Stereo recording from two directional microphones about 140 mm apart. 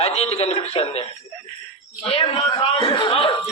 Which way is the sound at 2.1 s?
40° left (ahead or behind).